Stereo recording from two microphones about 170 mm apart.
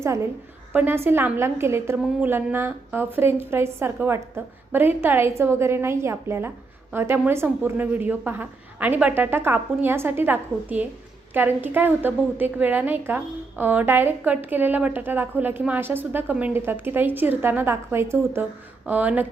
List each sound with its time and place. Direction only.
0.0 s a woman's voice: 15° right (ahead or behind)